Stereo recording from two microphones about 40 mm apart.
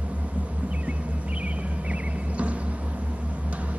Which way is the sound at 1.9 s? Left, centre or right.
Right.